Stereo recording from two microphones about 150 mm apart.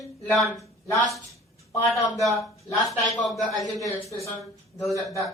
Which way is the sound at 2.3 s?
20° left (ahead or behind).